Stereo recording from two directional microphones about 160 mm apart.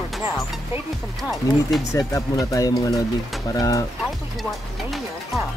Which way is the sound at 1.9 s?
20° left (ahead or behind).